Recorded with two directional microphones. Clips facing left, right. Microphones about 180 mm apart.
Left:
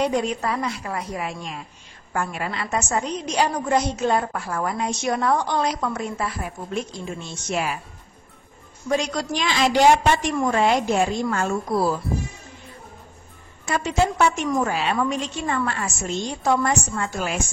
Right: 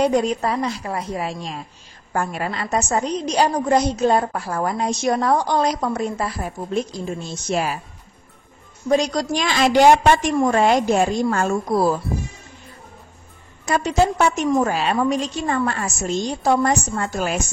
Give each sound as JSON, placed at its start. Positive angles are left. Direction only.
{"t": 0.0, "sound": "a woman's voice", "side_deg": -40}
{"t": 8.8, "sound": "a woman's voice", "side_deg": -35}
{"t": 13.7, "sound": "a woman's voice", "side_deg": -40}